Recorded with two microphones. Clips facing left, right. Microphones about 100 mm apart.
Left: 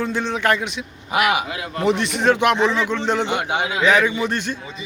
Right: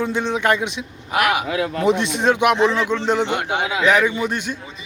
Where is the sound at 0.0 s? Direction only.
15° right (ahead or behind).